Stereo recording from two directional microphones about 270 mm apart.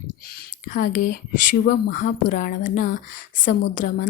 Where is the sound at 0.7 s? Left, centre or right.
Left.